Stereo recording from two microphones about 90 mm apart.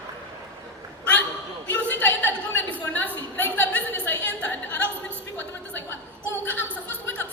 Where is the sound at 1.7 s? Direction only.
20° left (ahead or behind).